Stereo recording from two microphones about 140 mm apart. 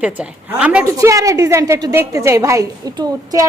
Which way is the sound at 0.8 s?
20° right (ahead or behind).